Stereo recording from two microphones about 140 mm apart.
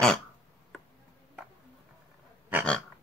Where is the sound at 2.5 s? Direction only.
15° right (ahead or behind).